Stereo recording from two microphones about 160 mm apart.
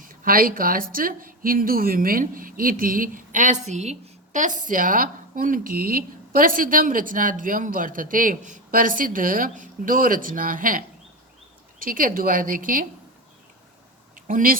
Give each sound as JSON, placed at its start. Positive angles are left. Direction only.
{"t": 0.0, "sound": "a woman's voice", "side_deg": -60}
{"t": 14.3, "sound": "speech", "side_deg": -60}